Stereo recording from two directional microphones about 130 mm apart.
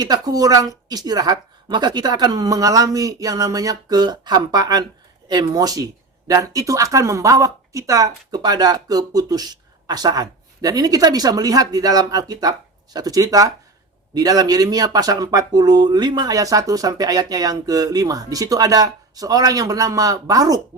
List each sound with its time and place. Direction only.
0.0 s speech: 30° right (ahead or behind)